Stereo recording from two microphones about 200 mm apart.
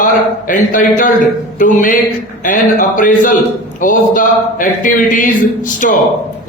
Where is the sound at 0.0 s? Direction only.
40° left (ahead or behind).